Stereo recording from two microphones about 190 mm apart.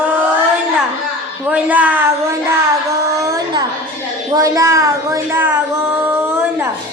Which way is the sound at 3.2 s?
20° right (ahead or behind).